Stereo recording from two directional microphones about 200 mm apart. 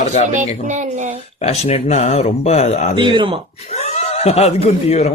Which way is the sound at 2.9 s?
25° right (ahead or behind).